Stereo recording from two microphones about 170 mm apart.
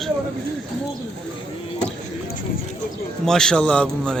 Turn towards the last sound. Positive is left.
turn(degrees=5)  # may be behind; listen again after turning